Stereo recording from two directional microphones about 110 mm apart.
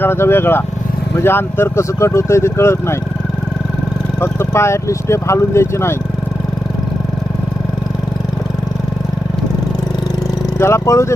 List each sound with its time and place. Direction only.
0.0 s speech: 20° left (ahead or behind)
4.2 s speech: 25° left (ahead or behind)
10.6 s speech: 25° left (ahead or behind)